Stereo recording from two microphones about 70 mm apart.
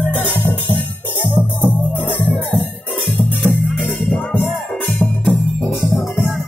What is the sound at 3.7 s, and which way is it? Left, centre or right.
Music, left.